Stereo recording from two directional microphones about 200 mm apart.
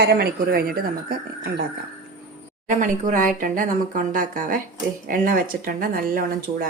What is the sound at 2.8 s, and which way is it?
A woman's voice, 40° right (ahead or behind).